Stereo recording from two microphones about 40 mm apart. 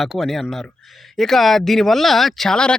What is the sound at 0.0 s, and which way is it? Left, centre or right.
Speech, centre.